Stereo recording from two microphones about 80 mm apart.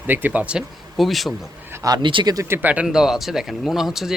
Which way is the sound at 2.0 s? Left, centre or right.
Right.